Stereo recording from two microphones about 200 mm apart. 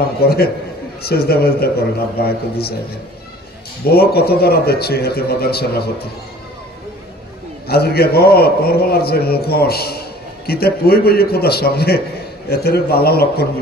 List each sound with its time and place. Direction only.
1.0 s a man's voice: 50° left (ahead or behind)
3.8 s a man's voice: 50° left (ahead or behind)
7.6 s a man's voice: 50° left (ahead or behind)